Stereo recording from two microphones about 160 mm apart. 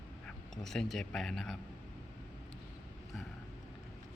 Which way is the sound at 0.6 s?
Centre (ahead or behind).